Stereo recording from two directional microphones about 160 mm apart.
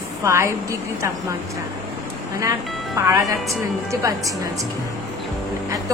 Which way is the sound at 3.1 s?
20° right (ahead or behind).